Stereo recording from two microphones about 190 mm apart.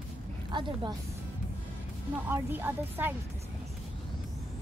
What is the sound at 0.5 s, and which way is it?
Speech, 25° right (ahead or behind).